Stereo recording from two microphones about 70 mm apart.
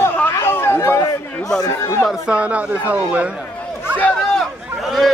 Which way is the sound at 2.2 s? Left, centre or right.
Centre.